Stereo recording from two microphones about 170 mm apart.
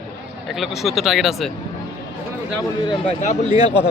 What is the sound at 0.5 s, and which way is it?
Speech, centre (ahead or behind).